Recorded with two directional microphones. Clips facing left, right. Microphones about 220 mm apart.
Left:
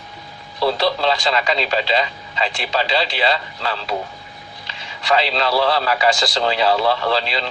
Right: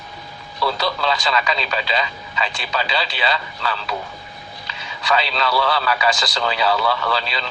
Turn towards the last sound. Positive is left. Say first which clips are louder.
# left 3 dB
turn(degrees=30)  # may be behind; listen again after turning